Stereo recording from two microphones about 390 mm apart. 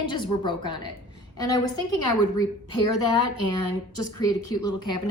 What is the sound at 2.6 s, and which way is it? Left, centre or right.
Speech, left.